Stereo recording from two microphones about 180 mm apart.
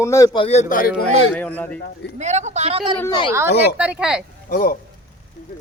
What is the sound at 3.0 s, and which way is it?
Speech, 20° left (ahead or behind).